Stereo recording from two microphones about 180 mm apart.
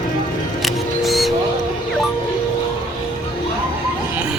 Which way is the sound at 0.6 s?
Centre (ahead or behind).